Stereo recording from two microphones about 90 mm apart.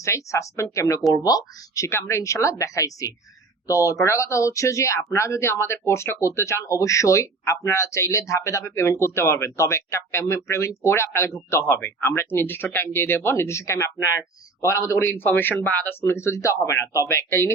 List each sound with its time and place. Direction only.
0.3 s speech: 35° left (ahead or behind)